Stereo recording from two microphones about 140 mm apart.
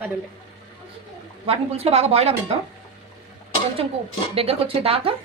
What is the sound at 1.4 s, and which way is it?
Speech, 45° right (ahead or behind).